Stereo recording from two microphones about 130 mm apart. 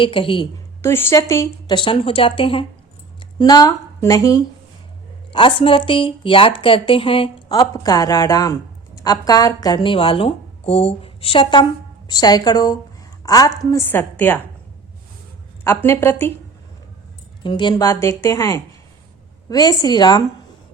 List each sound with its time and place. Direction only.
0.0 s speech: 45° left (ahead or behind)
0.8 s a woman's voice: 20° left (ahead or behind)
1.7 s speech: 40° left (ahead or behind)
3.2 s speech: 30° left (ahead or behind)
5.3 s speech: 40° left (ahead or behind)
7.7 s a woman's voice: 30° left (ahead or behind)
13.9 s a woman's voice: 15° left (ahead or behind)
15.6 s a woman's voice: 20° left (ahead or behind)
17.4 s a woman's voice: 35° left (ahead or behind)